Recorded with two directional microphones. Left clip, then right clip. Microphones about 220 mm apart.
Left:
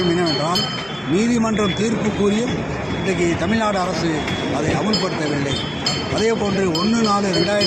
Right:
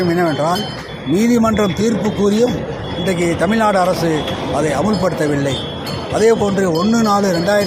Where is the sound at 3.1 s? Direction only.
40° right (ahead or behind).